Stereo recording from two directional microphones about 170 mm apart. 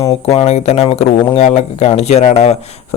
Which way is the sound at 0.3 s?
40° left (ahead or behind).